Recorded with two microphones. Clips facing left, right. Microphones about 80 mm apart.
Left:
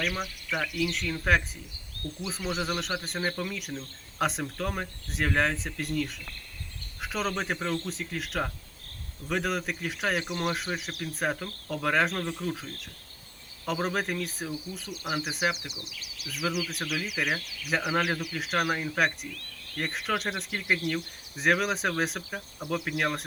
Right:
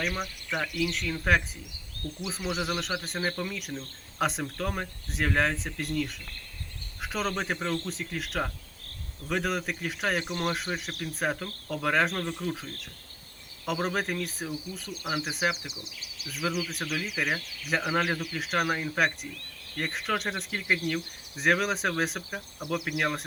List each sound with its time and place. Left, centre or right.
0.0 s speech: centre
2.0 s speech: right
2.5 s speech: centre
13.7 s speech: centre
15.7 s speech: right
16.3 s speech: centre
18.3 s speech: centre
22.3 s speech: centre